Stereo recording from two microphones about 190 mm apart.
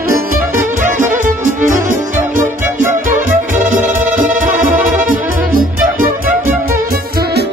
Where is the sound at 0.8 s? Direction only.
40° right (ahead or behind).